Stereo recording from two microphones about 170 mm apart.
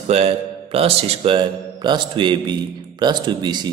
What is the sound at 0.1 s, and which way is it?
A man's voice, 35° right (ahead or behind).